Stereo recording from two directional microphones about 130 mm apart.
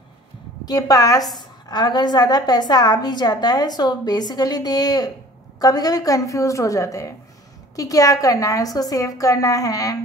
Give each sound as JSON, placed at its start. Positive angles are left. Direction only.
{"t": 0.7, "sound": "a woman's voice", "side_deg": 30}